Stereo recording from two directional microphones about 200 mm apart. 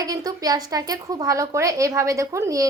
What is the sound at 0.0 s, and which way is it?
A woman's voice, 20° right (ahead or behind).